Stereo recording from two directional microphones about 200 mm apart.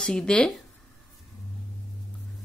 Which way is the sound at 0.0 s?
5° left (ahead or behind).